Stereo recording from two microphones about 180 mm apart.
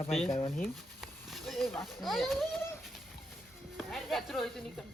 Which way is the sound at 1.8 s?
Centre (ahead or behind).